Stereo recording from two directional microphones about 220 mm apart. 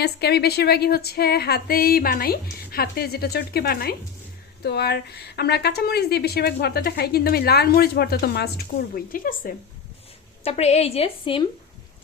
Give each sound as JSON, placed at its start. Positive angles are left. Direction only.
{"t": 0.0, "sound": "speech", "side_deg": 45}
{"t": 10.4, "sound": "a woman's voice", "side_deg": 30}